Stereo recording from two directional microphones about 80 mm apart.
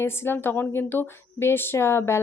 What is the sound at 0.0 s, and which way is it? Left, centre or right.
Speech, left.